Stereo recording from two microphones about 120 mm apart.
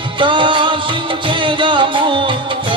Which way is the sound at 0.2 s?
45° right (ahead or behind).